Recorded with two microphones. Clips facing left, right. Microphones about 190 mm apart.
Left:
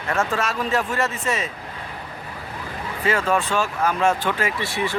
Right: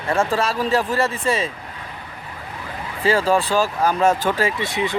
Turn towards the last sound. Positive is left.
turn(degrees=-20)  # may be behind; listen again after turning